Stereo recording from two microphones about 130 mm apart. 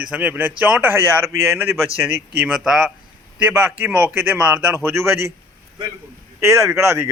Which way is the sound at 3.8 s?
15° right (ahead or behind).